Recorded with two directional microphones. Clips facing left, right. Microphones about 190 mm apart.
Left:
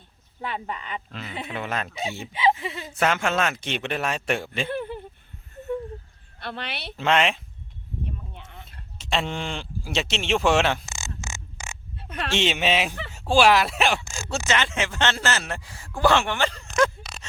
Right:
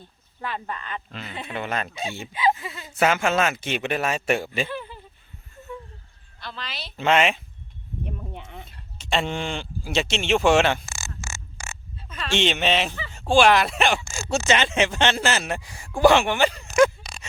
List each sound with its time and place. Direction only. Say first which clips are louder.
0.7 s speech: even; 10° left (ahead or behind)
2.3 s speech: left 1 dB; 25° left (ahead or behind)
3.0 s speech: right 2 dB; 5° right (ahead or behind)
4.7 s a sound: left 4 dB; 60° left (ahead or behind)
6.4 s speech: left 3 dB; 65° left (ahead or behind)
6.9 s speech: right 2 dB; centre (ahead or behind)
8.0 s a sound: right 4 dB; 60° right (ahead or behind)
9.0 s speech: right 2 dB; centre (ahead or behind)
10.8 s a sound: left 1 dB; 20° left (ahead or behind)
11.9 s dog: left 3 dB; 65° left (ahead or behind)
12.3 s speech: right 1 dB; 5° left (ahead or behind)
14.0 s speech: right 2 dB; 15° left (ahead or behind)
14.3 s speech: right 4 dB; 15° right (ahead or behind)